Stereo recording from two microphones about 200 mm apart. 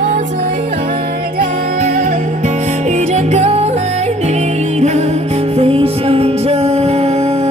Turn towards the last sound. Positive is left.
turn(degrees=-30)  # may be behind; listen again after turning